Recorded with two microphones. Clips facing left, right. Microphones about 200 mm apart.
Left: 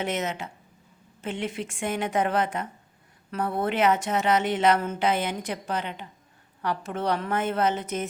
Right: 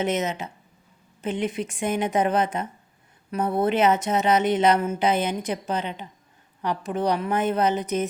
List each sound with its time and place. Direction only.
0.0 s a woman's voice: 20° right (ahead or behind)